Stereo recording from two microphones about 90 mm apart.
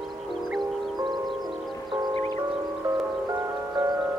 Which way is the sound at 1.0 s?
50° right (ahead or behind).